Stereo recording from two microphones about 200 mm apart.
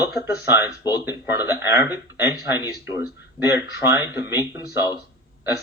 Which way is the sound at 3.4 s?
20° left (ahead or behind).